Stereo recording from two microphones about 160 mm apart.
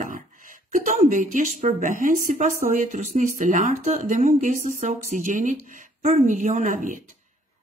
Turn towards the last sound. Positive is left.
turn(degrees=-55)  # may be behind; listen again after turning